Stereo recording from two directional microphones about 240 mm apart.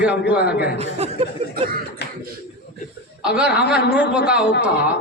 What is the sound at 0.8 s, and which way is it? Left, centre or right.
Chuckle, right.